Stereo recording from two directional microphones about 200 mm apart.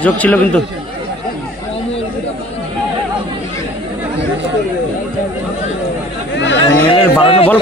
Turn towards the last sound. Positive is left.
turn(degrees=25)  # may be behind; listen again after turning